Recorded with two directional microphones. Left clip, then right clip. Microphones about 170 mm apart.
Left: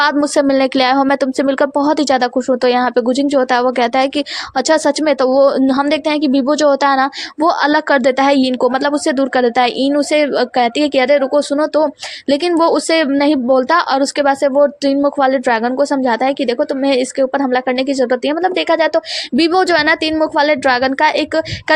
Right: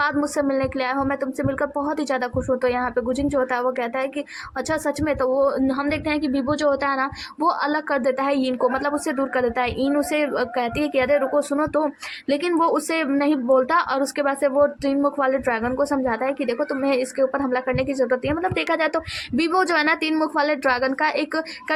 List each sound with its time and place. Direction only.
0.0 s speech: 35° left (ahead or behind)